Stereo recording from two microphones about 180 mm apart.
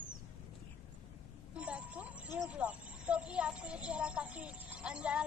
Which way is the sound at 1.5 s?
5° right (ahead or behind).